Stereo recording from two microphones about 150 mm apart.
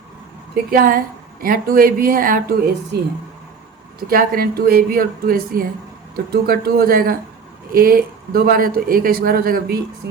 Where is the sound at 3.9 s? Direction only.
80° right.